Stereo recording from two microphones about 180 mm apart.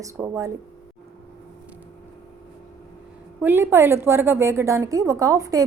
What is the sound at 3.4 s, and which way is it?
A woman's voice, 10° right (ahead or behind).